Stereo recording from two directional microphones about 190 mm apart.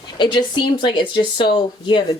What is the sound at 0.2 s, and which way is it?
Speech, 25° left (ahead or behind).